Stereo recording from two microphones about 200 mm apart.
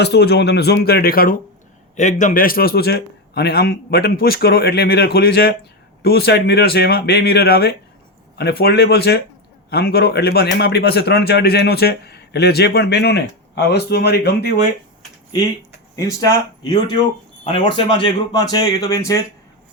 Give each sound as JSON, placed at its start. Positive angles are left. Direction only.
{"t": 0.0, "sound": "a man's voice", "side_deg": 55}
{"t": 16.0, "sound": "a man's voice", "side_deg": 15}